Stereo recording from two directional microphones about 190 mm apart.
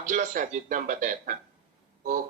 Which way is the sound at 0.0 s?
40° right (ahead or behind).